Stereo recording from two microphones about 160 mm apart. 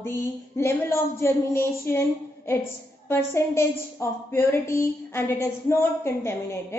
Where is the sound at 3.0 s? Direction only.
15° left (ahead or behind).